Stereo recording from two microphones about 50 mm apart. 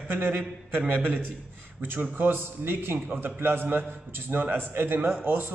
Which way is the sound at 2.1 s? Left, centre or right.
Right.